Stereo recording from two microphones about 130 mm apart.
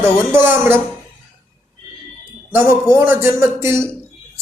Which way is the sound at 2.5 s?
20° right (ahead or behind).